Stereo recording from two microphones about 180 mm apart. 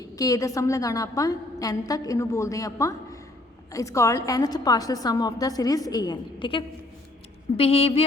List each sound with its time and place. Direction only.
0.0 s a woman's voice: 20° left (ahead or behind)